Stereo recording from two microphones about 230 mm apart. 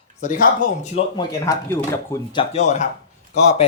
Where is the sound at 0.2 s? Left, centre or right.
Left.